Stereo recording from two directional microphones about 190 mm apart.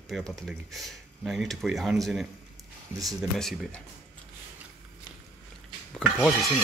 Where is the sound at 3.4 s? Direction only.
Centre (ahead or behind).